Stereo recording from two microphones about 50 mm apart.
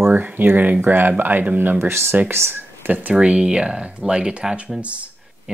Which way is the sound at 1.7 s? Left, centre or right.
Right.